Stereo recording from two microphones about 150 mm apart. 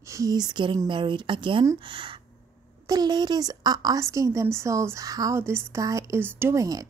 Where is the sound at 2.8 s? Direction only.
25° right (ahead or behind).